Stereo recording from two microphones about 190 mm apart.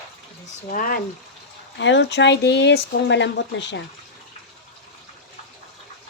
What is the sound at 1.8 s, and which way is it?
Speech, 70° left (ahead or behind).